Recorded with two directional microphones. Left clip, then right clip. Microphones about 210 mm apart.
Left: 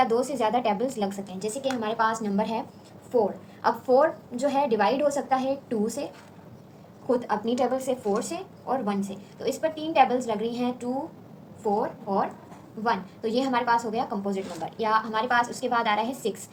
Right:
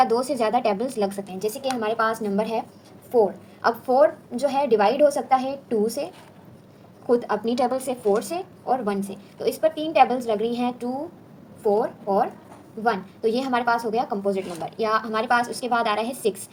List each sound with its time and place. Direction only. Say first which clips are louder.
0.0 s speech: right 3 dB; 35° right (ahead or behind)
7.1 s speech: right 4 dB; 40° right (ahead or behind)